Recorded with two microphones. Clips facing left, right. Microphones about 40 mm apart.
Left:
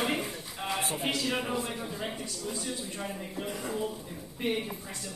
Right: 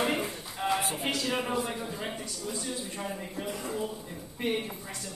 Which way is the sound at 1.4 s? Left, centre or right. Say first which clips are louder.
Right 2 dB; centre.